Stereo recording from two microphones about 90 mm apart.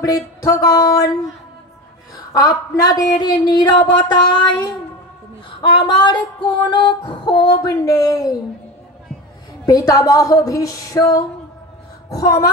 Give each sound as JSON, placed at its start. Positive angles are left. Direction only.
{"t": 0.0, "sound": "speech", "side_deg": 45}
{"t": 2.3, "sound": "speech", "side_deg": 45}
{"t": 5.6, "sound": "a sound", "side_deg": 60}
{"t": 7.7, "sound": "speech", "side_deg": 40}
{"t": 9.7, "sound": "speech", "side_deg": 40}